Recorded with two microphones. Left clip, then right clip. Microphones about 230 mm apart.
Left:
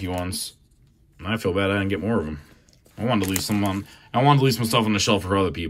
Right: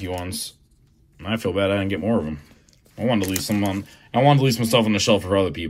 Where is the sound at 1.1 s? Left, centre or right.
Left.